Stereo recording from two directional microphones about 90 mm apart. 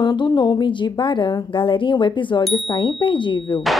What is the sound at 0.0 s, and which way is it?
A woman's voice, 60° left (ahead or behind).